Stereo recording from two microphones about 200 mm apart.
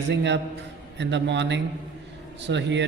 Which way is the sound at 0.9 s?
60° right (ahead or behind).